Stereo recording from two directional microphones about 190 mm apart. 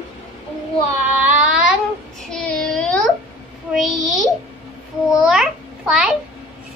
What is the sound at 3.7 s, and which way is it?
A child's voice, centre (ahead or behind).